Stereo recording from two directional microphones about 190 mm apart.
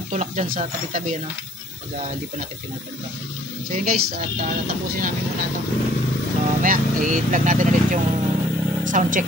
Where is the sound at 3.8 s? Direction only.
50° right (ahead or behind).